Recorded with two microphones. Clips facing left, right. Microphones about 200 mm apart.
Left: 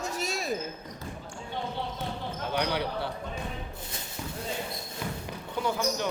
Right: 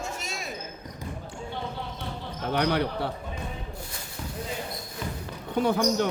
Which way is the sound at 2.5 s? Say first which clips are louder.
Right 5 dB; 55° right (ahead or behind).